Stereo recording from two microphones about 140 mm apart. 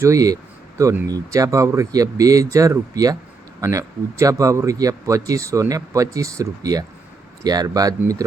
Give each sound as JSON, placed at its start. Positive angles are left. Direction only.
{"t": 0.0, "sound": "speech", "side_deg": -25}